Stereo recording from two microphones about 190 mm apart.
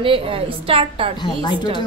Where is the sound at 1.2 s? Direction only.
25° left (ahead or behind).